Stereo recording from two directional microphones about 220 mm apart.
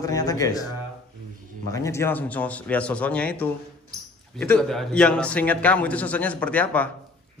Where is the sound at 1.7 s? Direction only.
15° left (ahead or behind).